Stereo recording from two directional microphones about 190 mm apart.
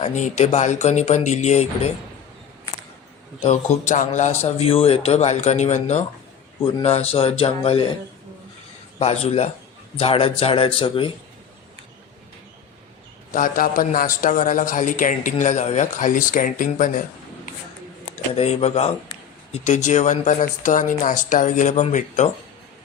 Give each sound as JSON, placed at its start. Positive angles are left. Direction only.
{"t": 0.0, "sound": "speech", "side_deg": 40}
{"t": 3.4, "sound": "speech", "side_deg": 35}
{"t": 9.0, "sound": "a man's voice", "side_deg": 30}
{"t": 13.3, "sound": "a man's voice", "side_deg": 45}
{"t": 18.3, "sound": "speech", "side_deg": 35}